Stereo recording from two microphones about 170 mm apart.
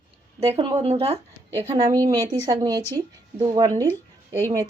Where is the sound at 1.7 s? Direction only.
20° right (ahead or behind).